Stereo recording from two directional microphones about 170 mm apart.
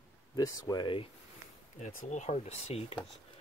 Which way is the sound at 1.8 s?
50° left (ahead or behind).